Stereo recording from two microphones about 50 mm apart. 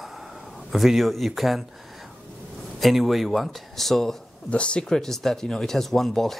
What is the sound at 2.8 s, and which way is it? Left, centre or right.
Speech, centre.